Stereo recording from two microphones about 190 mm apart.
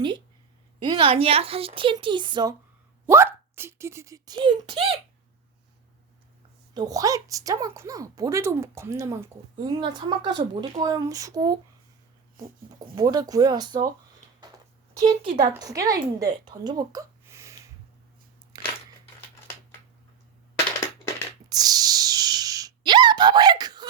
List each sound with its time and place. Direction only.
0.8 s a woman's voice: 25° right (ahead or behind)
6.7 s a woman's voice: 20° right (ahead or behind)
13.0 s a woman's voice: 20° right (ahead or behind)
14.9 s a woman's voice: 25° right (ahead or behind)
18.5 s a sound: 20° right (ahead or behind)
21.5 s gasp: 20° right (ahead or behind)